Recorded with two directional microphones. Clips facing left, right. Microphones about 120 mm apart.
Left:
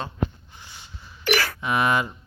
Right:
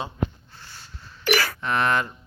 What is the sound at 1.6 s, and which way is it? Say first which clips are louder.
Speech: left 1 dB; 10° left (ahead or behind).